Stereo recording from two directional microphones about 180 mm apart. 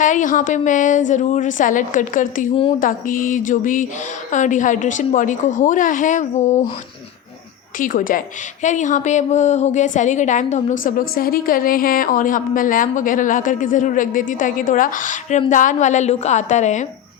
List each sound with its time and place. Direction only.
0.0 s a woman's voice: 45° left (ahead or behind)
7.8 s a woman's voice: 50° left (ahead or behind)